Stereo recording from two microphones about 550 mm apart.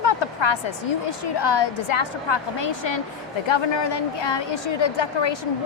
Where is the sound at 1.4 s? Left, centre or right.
Left.